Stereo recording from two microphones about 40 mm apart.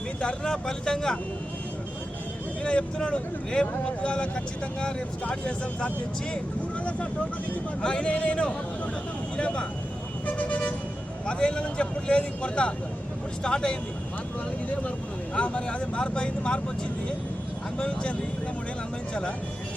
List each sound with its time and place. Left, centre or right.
0.2 s speech: left
2.6 s speech: left
10.2 s vehicle: left
11.3 s speech: left
15.4 s speech: left
17.7 s speech: left